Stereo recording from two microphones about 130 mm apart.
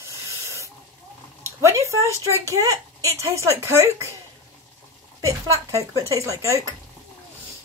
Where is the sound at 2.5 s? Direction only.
25° right (ahead or behind).